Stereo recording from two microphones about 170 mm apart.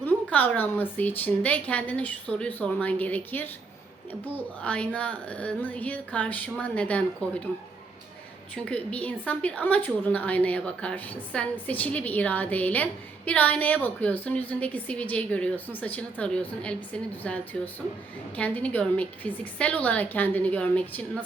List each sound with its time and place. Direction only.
0.0 s a woman's voice: 10° left (ahead or behind)
8.5 s a woman's voice: 5° left (ahead or behind)